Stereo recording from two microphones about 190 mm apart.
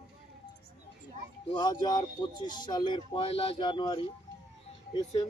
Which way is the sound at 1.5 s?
20° left (ahead or behind).